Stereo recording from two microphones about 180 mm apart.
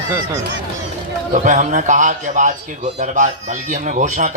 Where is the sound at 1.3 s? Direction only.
45° right (ahead or behind).